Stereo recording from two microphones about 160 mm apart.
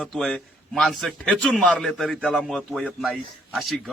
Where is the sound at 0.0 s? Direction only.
Centre (ahead or behind).